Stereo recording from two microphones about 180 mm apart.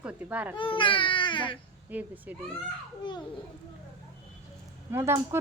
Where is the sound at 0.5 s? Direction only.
30° left (ahead or behind).